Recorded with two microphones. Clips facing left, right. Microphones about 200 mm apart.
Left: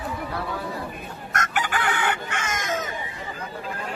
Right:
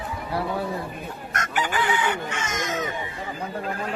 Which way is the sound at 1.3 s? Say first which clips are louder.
Even; 50° left (ahead or behind).